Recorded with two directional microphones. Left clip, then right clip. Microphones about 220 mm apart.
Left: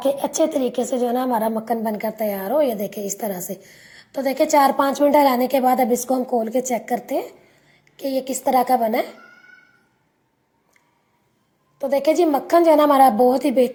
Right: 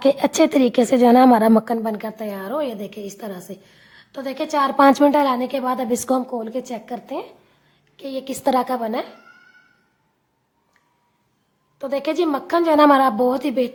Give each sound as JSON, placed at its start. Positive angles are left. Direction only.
{"t": 0.0, "sound": "a woman's voice", "side_deg": -20}
{"t": 1.6, "sound": "a woman's voice", "side_deg": -10}
{"t": 4.8, "sound": "a woman's voice", "side_deg": -20}
{"t": 5.1, "sound": "a woman's voice", "side_deg": 0}
{"t": 11.8, "sound": "a woman's voice", "side_deg": 0}